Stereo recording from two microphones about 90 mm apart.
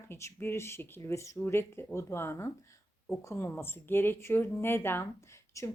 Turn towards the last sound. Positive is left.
turn(degrees=35)  # may be behind; listen again after turning